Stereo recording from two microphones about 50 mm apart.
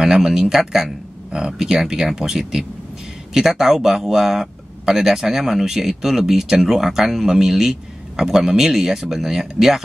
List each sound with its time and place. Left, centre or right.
0.0 s speech: centre